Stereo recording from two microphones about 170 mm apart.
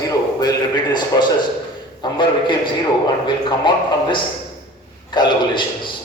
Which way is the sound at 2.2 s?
30° left (ahead or behind).